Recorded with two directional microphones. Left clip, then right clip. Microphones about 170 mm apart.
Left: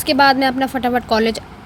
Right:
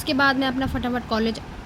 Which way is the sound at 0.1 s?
35° left (ahead or behind).